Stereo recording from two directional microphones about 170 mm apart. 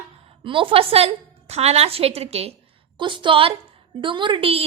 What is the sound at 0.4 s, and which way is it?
A woman's voice, 30° right (ahead or behind).